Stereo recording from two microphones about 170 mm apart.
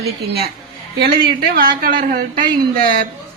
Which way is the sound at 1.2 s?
65° right (ahead or behind).